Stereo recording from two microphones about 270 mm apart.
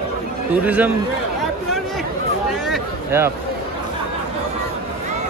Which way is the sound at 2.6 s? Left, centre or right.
Centre.